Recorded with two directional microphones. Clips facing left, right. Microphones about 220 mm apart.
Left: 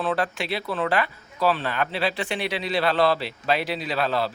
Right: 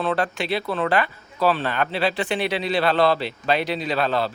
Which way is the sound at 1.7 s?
Centre (ahead or behind).